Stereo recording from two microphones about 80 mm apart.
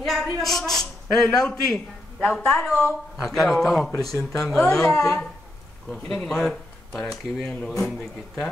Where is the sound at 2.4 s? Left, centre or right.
Centre.